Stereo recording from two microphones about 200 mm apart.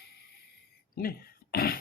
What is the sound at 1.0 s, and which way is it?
Speech, 50° left (ahead or behind).